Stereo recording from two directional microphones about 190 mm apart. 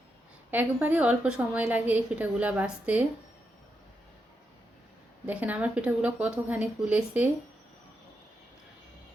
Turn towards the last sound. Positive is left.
turn(degrees=-5)  # may be behind; listen again after turning